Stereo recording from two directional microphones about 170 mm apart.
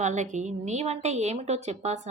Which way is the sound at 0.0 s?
45° right (ahead or behind).